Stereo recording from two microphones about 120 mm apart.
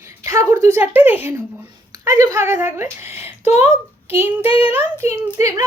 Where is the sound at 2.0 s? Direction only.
30° right (ahead or behind).